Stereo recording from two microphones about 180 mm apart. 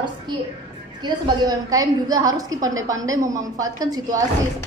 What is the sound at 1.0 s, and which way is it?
A woman's voice, 20° right (ahead or behind).